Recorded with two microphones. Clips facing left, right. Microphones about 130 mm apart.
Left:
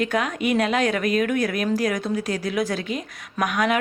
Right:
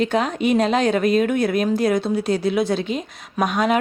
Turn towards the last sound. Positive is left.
turn(degrees=-25)  # may be behind; listen again after turning